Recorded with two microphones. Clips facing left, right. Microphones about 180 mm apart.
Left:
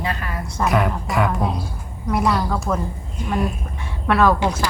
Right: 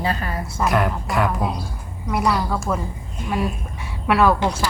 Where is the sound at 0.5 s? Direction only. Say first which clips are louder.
Left 1 dB; centre (ahead or behind).